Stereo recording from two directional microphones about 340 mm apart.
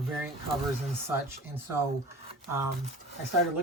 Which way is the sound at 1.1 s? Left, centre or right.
Centre.